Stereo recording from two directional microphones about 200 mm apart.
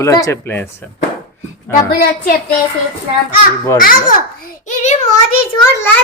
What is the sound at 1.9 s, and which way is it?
Speech, 50° left (ahead or behind).